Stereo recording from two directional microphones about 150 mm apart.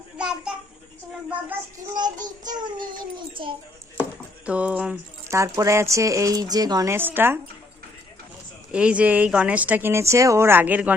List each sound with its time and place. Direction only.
0.2 s a sound: 5° right (ahead or behind)
2.0 s speech: 25° right (ahead or behind)
4.4 s speech: 10° right (ahead or behind)
5.3 s speech: 20° right (ahead or behind)
8.7 s speech: 10° right (ahead or behind)